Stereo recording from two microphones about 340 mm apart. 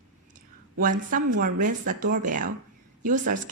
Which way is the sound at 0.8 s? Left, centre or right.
Right.